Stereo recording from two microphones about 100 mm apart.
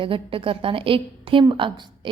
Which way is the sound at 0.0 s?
60° right (ahead or behind).